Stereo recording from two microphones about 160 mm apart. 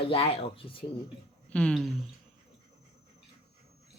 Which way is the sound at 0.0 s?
35° left (ahead or behind).